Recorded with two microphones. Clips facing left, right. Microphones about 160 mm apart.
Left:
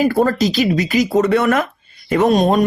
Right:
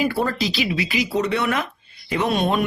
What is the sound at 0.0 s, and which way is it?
A man's voice, 45° left (ahead or behind).